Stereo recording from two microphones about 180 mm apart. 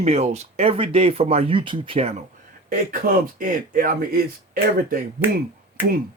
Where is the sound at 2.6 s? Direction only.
50° right (ahead or behind).